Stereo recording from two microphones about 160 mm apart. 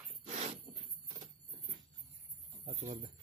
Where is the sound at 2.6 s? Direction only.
50° right (ahead or behind).